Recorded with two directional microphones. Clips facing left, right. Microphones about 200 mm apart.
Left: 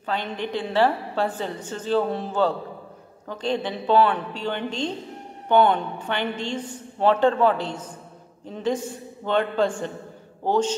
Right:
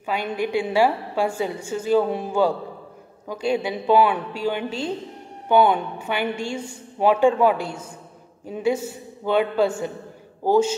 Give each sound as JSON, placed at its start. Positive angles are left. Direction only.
{"t": 0.0, "sound": "a woman's voice", "side_deg": -10}